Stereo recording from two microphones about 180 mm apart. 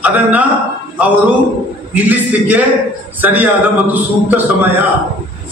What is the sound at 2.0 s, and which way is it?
A man's voice, 10° right (ahead or behind).